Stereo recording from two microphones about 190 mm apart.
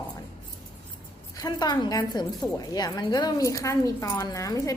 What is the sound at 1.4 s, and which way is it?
A woman's voice, 20° left (ahead or behind).